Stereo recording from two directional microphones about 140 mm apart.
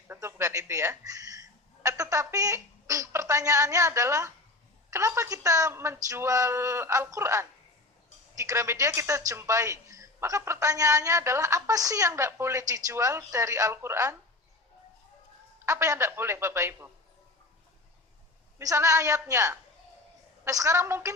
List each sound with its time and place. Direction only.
0.1 s a woman's voice: 20° right (ahead or behind)
15.6 s a woman's voice: 20° right (ahead or behind)
18.6 s a woman's voice: 25° right (ahead or behind)